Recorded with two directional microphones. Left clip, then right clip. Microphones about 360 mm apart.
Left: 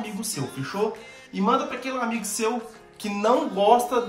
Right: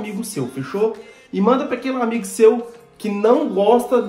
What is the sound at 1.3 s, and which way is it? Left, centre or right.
Speech, centre.